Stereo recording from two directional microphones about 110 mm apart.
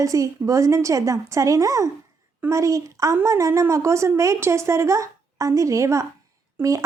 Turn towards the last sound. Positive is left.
turn(degrees=-30)  # may be behind; listen again after turning